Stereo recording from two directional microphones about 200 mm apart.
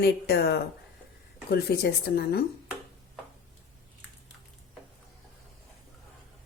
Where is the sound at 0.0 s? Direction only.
55° left (ahead or behind).